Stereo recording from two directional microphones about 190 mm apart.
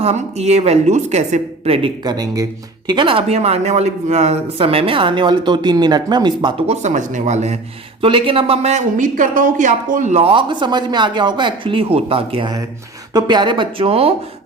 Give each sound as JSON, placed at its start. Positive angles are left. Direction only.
{"t": 0.0, "sound": "speech", "side_deg": -35}